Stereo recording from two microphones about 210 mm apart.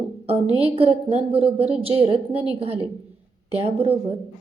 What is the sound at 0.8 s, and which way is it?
A woman's voice, 30° right (ahead or behind).